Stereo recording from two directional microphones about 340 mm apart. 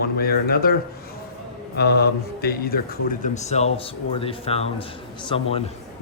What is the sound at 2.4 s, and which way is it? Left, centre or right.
Speech, left.